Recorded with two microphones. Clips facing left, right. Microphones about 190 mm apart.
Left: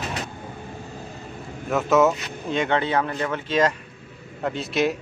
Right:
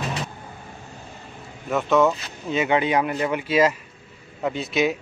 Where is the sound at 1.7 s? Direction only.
Centre (ahead or behind).